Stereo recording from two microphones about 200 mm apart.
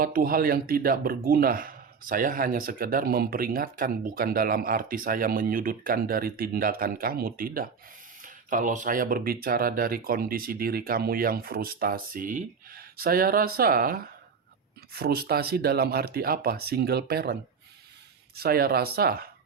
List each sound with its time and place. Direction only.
0.0 s speech: 45° right (ahead or behind)
18.3 s speech: 50° right (ahead or behind)